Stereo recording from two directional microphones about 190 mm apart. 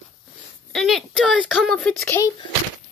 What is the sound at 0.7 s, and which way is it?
Speech, centre (ahead or behind).